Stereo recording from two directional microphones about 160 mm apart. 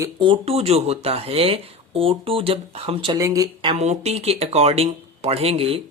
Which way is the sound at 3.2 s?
20° right (ahead or behind).